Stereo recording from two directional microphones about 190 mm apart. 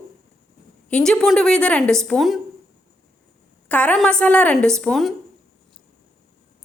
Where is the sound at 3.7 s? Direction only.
5° left (ahead or behind).